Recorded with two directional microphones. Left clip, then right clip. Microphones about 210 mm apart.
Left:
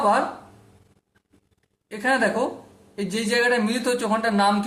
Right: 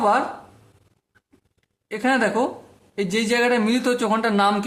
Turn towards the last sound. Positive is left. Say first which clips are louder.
# right 1 dB
turn(degrees=-35)  # may be behind; listen again after turning